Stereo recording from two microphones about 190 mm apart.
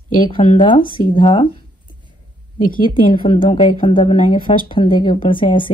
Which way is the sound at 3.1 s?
25° left (ahead or behind).